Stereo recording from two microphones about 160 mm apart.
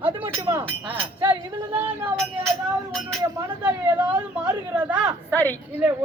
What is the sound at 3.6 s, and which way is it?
Speech, 10° right (ahead or behind).